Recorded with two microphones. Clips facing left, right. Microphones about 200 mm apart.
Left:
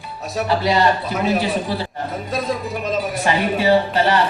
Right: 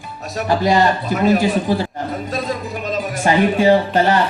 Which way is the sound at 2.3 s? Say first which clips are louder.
Left 3 dB; centre (ahead or behind).